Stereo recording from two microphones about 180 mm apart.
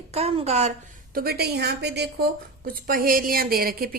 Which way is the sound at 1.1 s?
60° right (ahead or behind).